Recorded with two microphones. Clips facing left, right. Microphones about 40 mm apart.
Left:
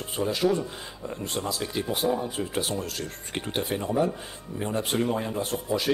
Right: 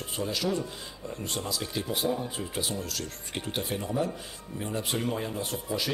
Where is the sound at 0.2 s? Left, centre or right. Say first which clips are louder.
Left 5 dB; left.